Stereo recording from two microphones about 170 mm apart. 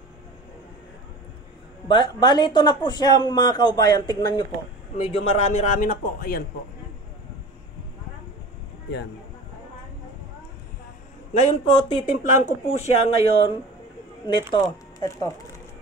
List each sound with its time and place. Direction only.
1.9 s speech: 25° left (ahead or behind)
5.0 s a man's voice: 35° left (ahead or behind); by 6.4 s 60° left (ahead or behind)
11.3 s speech: 35° left (ahead or behind)
12.2 s speech: 45° left (ahead or behind)
14.5 s speech: 20° left (ahead or behind)